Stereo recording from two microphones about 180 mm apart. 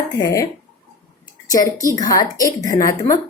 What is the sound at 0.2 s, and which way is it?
Speech, 20° left (ahead or behind).